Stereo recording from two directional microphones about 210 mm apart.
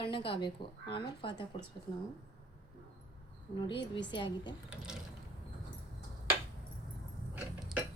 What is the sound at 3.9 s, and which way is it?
Speech, 20° left (ahead or behind).